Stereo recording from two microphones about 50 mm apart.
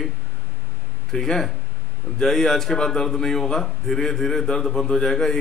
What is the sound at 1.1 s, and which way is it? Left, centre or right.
A man's voice, centre.